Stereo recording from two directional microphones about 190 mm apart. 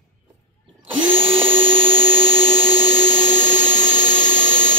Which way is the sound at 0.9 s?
25° right (ahead or behind).